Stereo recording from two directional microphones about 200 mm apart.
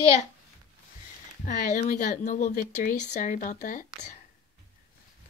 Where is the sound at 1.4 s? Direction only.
40° left (ahead or behind).